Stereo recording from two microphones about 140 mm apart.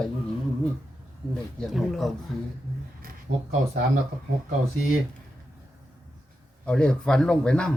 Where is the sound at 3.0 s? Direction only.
90° right.